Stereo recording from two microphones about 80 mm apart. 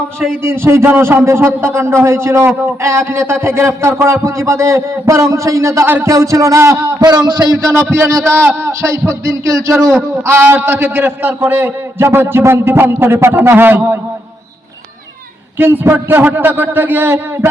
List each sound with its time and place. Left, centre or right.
0.4 s a man's voice: right
5.8 s a man's voice: right
6.1 s a man's voice: right
7.3 s a man's voice: right
7.8 s a man's voice: right
15.5 s a man's voice: right